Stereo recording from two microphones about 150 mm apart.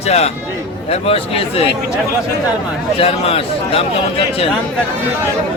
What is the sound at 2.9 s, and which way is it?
Speech, 40° left (ahead or behind).